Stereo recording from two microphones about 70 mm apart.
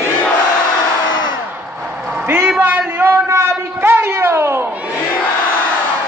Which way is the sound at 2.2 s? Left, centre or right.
Right.